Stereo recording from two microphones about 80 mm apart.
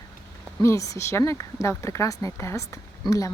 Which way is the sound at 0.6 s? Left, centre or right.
Left.